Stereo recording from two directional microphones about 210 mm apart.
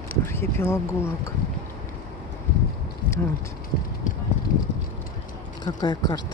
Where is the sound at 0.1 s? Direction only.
10° left (ahead or behind).